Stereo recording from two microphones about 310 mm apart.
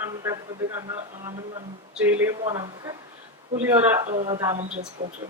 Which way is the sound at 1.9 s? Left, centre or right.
Centre.